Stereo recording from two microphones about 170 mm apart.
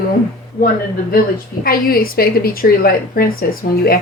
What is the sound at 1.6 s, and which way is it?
Speech, 60° left (ahead or behind).